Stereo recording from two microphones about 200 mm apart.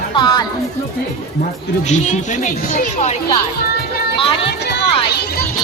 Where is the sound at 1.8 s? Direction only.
35° left (ahead or behind).